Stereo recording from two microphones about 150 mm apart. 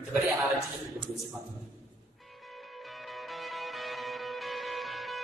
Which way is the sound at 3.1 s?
Centre (ahead or behind).